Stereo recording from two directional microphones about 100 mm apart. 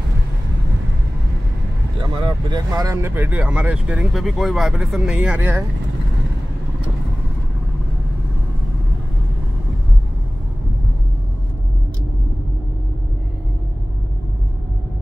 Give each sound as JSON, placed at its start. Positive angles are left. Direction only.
{"t": 2.0, "sound": "speech", "side_deg": -45}
{"t": 3.2, "sound": "speech", "side_deg": -15}
{"t": 4.1, "sound": "speech", "side_deg": 0}